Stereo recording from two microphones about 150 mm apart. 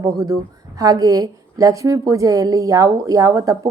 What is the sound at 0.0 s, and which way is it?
A woman's voice, 25° right (ahead or behind).